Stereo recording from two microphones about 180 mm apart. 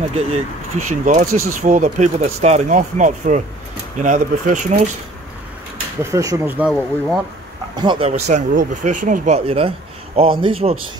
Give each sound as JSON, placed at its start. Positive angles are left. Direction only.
{"t": 0.1, "sound": "speech", "side_deg": -35}
{"t": 6.0, "sound": "speech", "side_deg": -15}
{"t": 7.7, "sound": "speech", "side_deg": -25}
{"t": 8.1, "sound": "speech", "side_deg": -40}